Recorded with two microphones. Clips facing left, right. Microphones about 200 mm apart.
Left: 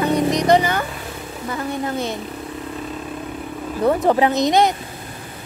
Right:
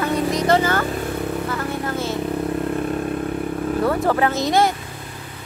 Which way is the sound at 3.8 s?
20° left (ahead or behind).